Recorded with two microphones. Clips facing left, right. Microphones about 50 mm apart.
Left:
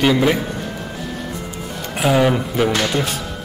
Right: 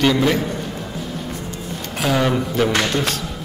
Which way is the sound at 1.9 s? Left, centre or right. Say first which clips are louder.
Left 3 dB; centre.